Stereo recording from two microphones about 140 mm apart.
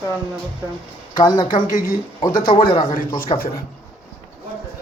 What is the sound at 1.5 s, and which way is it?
Speech, 85° left.